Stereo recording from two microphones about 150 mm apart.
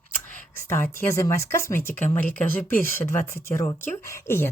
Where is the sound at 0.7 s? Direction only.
15° left (ahead or behind).